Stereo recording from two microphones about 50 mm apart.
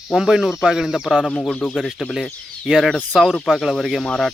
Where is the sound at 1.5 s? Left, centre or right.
Left.